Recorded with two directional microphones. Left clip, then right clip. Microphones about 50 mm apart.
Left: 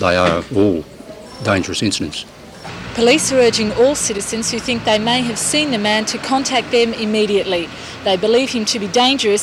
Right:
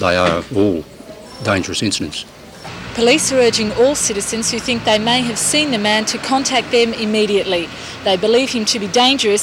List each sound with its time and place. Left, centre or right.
0.0 s speech: right